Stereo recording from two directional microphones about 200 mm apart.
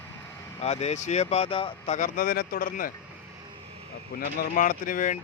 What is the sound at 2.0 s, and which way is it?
Speech, 45° left (ahead or behind).